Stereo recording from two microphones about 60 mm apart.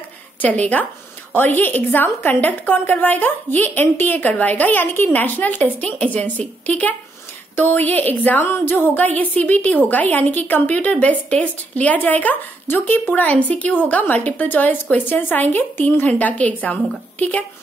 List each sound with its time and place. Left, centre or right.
0.4 s a woman's voice: left